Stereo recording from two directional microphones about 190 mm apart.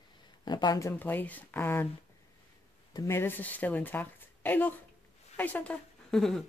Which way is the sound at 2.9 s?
15° left (ahead or behind).